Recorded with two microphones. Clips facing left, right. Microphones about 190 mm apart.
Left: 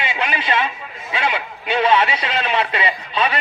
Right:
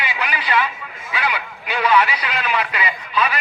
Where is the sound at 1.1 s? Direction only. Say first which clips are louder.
Left 2 dB; 25° left (ahead or behind).